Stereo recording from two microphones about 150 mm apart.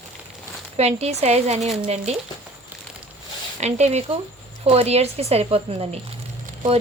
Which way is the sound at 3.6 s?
50° right (ahead or behind).